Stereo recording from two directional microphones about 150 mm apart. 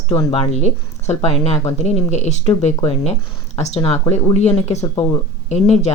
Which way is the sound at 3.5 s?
45° left (ahead or behind).